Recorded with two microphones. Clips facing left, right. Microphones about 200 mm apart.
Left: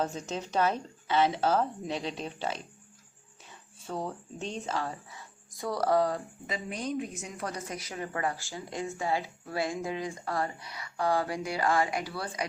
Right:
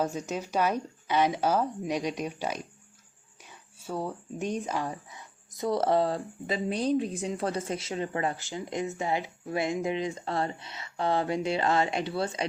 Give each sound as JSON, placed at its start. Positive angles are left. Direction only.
{"t": 0.0, "sound": "speech", "side_deg": -10}
{"t": 3.8, "sound": "speech", "side_deg": -10}